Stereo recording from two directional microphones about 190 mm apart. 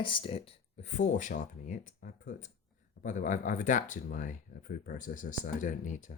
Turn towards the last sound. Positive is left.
turn(degrees=40)  # may be behind; listen again after turning